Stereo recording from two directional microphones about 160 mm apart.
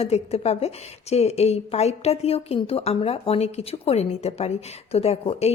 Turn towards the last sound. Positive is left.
turn(degrees=40)  # may be behind; listen again after turning